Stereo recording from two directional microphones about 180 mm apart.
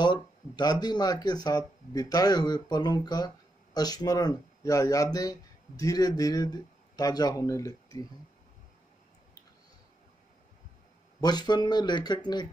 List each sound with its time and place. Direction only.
0.0 s speech: 25° left (ahead or behind)
11.1 s speech: 20° left (ahead or behind)